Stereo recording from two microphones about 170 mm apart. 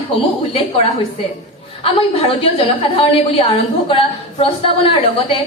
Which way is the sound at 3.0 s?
35° left (ahead or behind).